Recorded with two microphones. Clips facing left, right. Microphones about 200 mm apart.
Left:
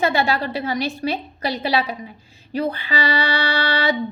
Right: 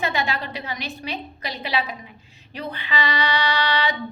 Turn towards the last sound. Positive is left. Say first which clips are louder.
# left 3 dB
turn(degrees=40)  # may be behind; listen again after turning